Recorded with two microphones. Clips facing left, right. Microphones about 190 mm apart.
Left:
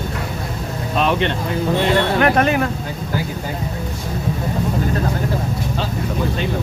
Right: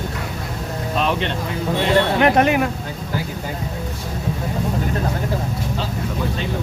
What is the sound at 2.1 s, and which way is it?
Speech, 20° right (ahead or behind).